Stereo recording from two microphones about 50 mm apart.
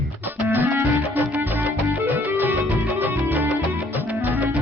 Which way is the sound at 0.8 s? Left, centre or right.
Right.